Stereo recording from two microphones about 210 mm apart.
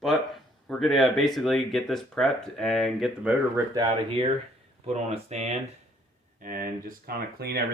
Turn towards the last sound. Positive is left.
turn(degrees=-50)  # may be behind; listen again after turning